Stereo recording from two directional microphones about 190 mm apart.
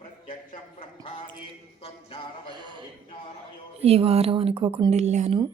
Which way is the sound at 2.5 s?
25° right (ahead or behind).